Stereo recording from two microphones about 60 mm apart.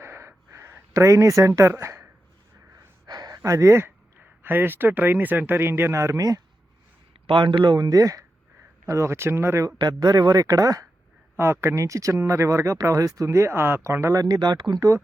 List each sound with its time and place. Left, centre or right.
0.0 s a sound: right
1.8 s a sound: right
2.7 s gasp: right
4.2 s speech: right
7.8 s speech: right
8.9 s speech: right
9.6 s speech: right
11.3 s speech: right
14.0 s speech: right